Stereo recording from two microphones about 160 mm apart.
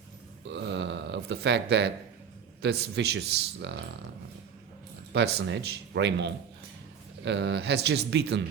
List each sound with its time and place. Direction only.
0.4 s speech: 90° right
5.1 s speech: 90° right